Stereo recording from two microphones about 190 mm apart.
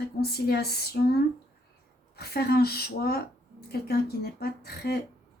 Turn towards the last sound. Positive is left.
turn(degrees=55)  # may be behind; listen again after turning